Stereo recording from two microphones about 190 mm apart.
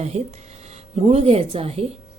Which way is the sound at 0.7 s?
35° right (ahead or behind).